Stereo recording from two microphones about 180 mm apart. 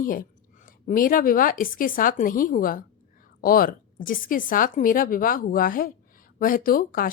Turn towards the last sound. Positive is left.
turn(degrees=50)  # may be behind; listen again after turning